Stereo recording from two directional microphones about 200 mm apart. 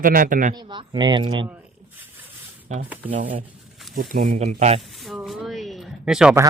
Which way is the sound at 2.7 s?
35° right (ahead or behind).